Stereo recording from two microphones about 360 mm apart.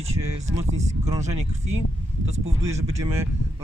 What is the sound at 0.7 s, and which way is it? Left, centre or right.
Speech, centre.